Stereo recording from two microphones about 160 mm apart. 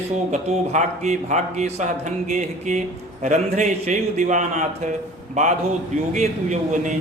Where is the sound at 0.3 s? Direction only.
45° right (ahead or behind).